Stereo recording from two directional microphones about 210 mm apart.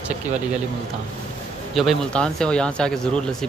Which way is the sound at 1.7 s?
Centre (ahead or behind).